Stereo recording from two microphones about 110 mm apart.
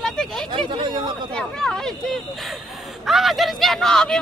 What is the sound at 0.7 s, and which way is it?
Speech, 45° right (ahead or behind).